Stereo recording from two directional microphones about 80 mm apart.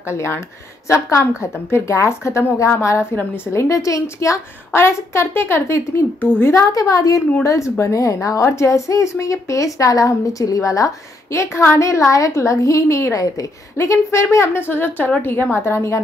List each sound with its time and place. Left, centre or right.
0.1 s a woman's voice: left
6.2 s speech: left
6.5 s a woman's voice: left
15.5 s a woman's voice: left